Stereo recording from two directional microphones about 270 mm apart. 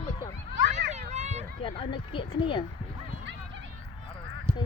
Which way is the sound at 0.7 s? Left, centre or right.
Right.